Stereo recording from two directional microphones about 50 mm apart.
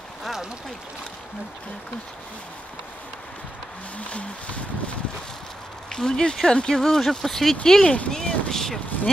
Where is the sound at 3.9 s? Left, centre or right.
Left.